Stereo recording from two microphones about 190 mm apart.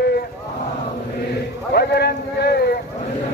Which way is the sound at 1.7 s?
60° left (ahead or behind).